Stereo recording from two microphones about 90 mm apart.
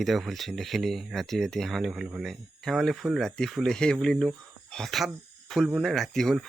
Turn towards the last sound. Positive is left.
turn(degrees=5)  # may be behind; listen again after turning